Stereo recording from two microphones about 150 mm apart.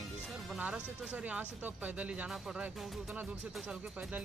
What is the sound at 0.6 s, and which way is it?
Speech, 10° right (ahead or behind).